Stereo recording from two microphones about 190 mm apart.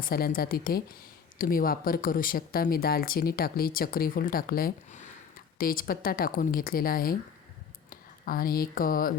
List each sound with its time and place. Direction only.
0.0 s speech: 50° left (ahead or behind)